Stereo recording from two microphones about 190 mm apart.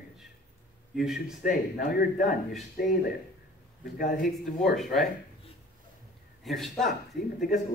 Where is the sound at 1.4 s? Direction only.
45° left (ahead or behind).